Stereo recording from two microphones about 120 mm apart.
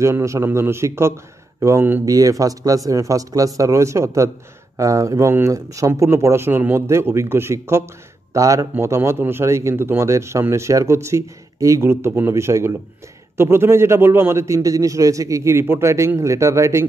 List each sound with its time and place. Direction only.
0.0 s speech: 25° right (ahead or behind)
2.0 s speech: 30° right (ahead or behind)